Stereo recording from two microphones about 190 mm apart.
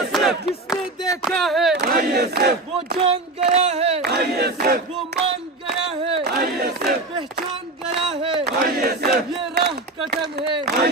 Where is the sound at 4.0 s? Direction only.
60° right (ahead or behind).